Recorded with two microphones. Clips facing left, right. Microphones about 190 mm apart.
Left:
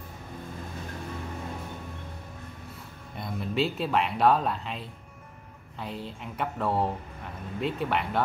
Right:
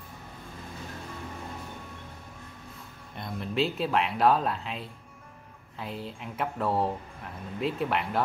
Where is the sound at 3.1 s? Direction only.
Centre (ahead or behind).